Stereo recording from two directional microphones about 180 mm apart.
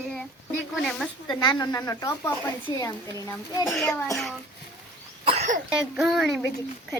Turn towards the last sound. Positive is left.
turn(degrees=0)  # may be behind; listen again after turning